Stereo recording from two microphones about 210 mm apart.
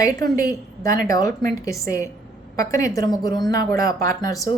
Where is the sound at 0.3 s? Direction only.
15° left (ahead or behind).